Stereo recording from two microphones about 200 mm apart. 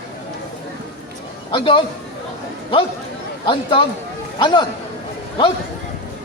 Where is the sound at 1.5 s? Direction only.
25° left (ahead or behind).